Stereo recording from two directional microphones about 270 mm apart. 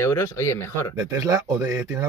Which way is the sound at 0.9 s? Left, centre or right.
Centre.